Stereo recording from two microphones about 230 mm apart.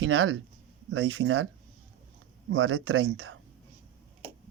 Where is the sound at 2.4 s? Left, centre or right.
Right.